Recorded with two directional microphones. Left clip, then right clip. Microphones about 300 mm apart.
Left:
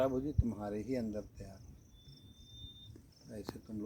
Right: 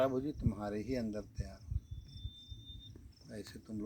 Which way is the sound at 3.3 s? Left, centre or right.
Centre.